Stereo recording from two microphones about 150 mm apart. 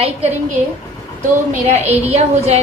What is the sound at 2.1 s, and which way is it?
Speech, 45° right (ahead or behind).